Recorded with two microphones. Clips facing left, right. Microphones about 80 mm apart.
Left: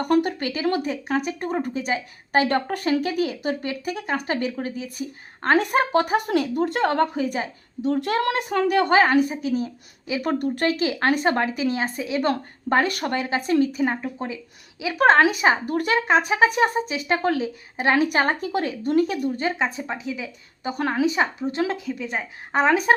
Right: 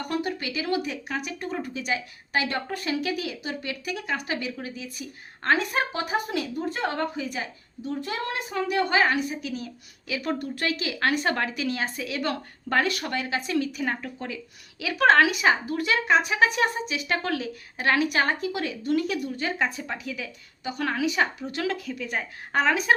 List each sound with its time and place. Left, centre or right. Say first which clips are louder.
0.0 s speech: left 8 dB; left
5.5 s a woman's voice: left 8 dB; left
6.7 s a woman's voice: left 7 dB; left
7.8 s a woman's voice: left 8 dB; left
10.4 s a woman's voice: left 7 dB; left
10.7 s speech: left 3 dB; left
13.8 s a woman's voice: left 5 dB; left
20.7 s a woman's voice: left 4 dB; left